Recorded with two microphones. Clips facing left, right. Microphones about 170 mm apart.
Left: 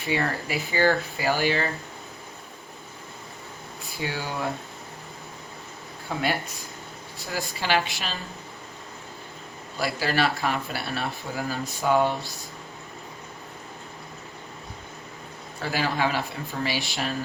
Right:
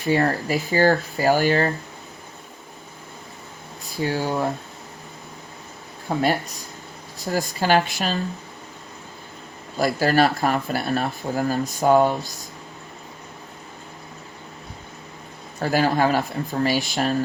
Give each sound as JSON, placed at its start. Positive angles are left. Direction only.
{"t": 0.0, "sound": "speech", "side_deg": -40}
{"t": 4.0, "sound": "speech", "side_deg": -40}
{"t": 6.1, "sound": "speech", "side_deg": -35}
{"t": 7.3, "sound": "speech", "side_deg": -40}
{"t": 9.7, "sound": "speech", "side_deg": -45}
{"t": 15.6, "sound": "speech", "side_deg": -45}